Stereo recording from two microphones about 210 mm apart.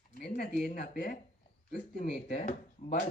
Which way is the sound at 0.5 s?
45° left (ahead or behind).